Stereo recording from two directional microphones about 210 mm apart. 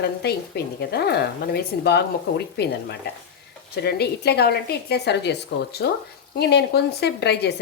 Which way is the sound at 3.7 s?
50° left (ahead or behind).